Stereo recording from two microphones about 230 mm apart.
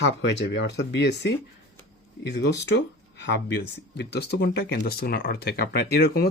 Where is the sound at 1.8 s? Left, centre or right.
Left.